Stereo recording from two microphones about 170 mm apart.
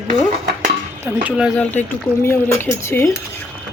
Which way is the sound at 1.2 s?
5° right (ahead or behind).